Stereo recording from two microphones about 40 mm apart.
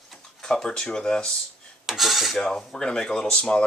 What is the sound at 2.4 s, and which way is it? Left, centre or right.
Speech, centre.